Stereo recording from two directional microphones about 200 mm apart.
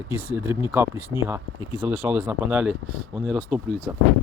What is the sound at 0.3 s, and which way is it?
Speech, 10° right (ahead or behind).